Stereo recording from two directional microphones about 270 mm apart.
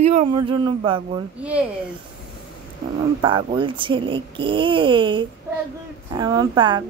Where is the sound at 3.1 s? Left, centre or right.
Centre.